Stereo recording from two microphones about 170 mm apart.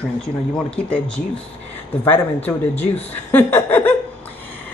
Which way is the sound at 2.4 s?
10° left (ahead or behind).